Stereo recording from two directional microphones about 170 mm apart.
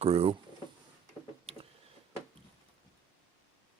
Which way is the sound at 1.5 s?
35° right (ahead or behind).